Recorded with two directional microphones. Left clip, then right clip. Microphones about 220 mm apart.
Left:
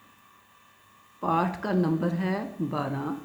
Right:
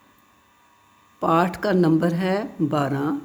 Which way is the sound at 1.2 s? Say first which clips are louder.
Right 7 dB; 55° right (ahead or behind).